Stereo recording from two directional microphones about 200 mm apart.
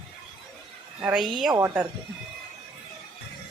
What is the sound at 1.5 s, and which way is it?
Speech, 15° right (ahead or behind).